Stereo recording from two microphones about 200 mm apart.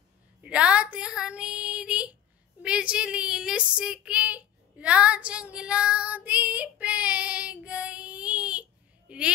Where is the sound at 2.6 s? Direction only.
5° right (ahead or behind).